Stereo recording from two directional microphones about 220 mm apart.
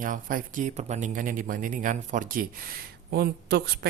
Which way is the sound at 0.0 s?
40° right (ahead or behind).